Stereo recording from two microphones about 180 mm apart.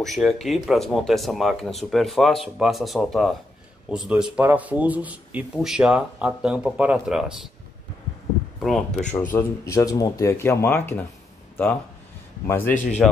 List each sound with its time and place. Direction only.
0.0 s speech: centre (ahead or behind)
8.5 s speech: centre (ahead or behind)
9.3 s speech: 15° left (ahead or behind)